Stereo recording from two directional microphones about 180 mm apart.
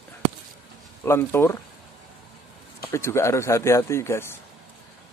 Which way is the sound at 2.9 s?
15° left (ahead or behind).